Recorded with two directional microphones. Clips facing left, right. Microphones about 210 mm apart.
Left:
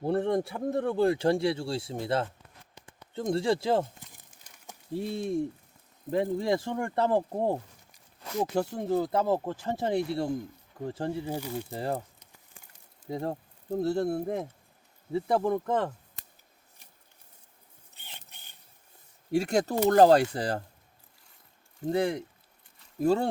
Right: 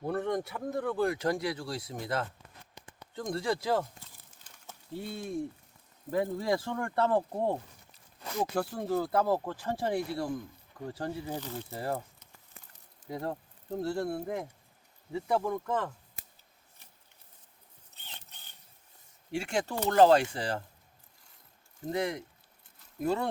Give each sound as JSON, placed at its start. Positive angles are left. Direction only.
{"t": 0.0, "sound": "speech", "side_deg": 30}
{"t": 3.2, "sound": "a sound", "side_deg": 25}
{"t": 4.9, "sound": "speech", "side_deg": 25}
{"t": 8.5, "sound": "speech", "side_deg": 20}
{"t": 11.3, "sound": "speech", "side_deg": 10}
{"t": 13.1, "sound": "speech", "side_deg": 25}
{"t": 17.9, "sound": "a sound", "side_deg": 10}
{"t": 19.3, "sound": "speech", "side_deg": 40}
{"t": 21.9, "sound": "speech", "side_deg": 30}